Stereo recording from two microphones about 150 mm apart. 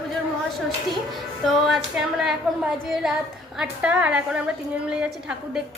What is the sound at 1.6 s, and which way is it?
A woman's voice, centre (ahead or behind).